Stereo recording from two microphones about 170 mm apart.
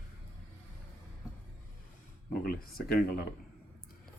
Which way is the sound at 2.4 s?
60° left (ahead or behind).